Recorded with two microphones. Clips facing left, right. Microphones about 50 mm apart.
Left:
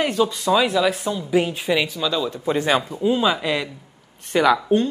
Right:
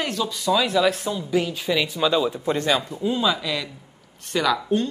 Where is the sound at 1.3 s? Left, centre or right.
Left.